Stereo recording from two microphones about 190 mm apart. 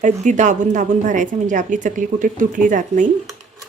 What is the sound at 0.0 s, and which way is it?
A woman's voice, 40° right (ahead or behind).